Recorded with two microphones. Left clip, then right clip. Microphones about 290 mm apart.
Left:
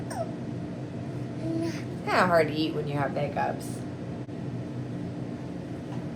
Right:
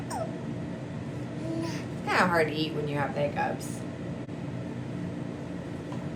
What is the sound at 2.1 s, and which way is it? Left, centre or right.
A woman's voice, centre.